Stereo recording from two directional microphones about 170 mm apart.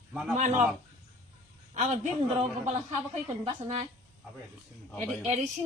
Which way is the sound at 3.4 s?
35° right (ahead or behind).